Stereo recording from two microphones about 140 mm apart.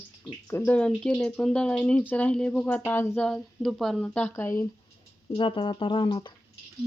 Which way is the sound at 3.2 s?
5° left (ahead or behind).